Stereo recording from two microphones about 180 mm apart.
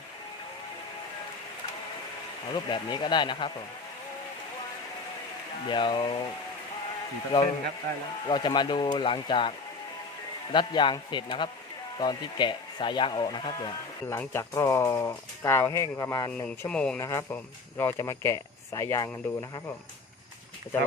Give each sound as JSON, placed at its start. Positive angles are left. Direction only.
{"t": 2.6, "sound": "speech", "side_deg": 25}
{"t": 5.6, "sound": "speech", "side_deg": 25}
{"t": 8.3, "sound": "speech", "side_deg": 25}
{"t": 14.1, "sound": "speech", "side_deg": 15}
{"t": 16.6, "sound": "speech", "side_deg": 5}
{"t": 17.0, "sound": "speech", "side_deg": 15}